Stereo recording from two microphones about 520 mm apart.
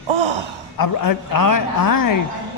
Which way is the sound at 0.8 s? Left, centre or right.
Left.